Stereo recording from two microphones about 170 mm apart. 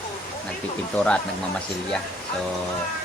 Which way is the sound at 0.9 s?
5° left (ahead or behind).